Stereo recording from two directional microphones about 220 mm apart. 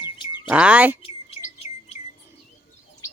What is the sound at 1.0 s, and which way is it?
Bird, 25° left (ahead or behind).